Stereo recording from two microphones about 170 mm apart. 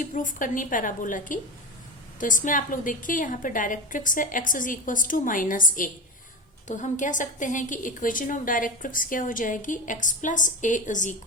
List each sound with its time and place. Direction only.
0.0 s a woman's voice: 50° left (ahead or behind)